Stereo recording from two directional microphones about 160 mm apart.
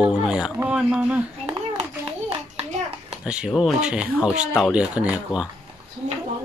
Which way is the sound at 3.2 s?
5° right (ahead or behind).